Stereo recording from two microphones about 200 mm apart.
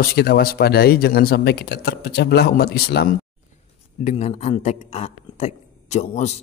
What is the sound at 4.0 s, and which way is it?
Speech, 35° left (ahead or behind).